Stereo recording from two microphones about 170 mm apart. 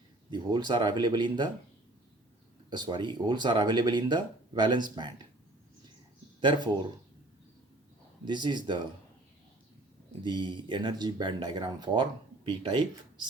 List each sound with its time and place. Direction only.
0.3 s speech: 25° right (ahead or behind)
2.6 s speech: 25° right (ahead or behind)
6.4 s speech: 25° right (ahead or behind)
8.3 s speech: 25° right (ahead or behind)
10.2 s speech: 25° right (ahead or behind)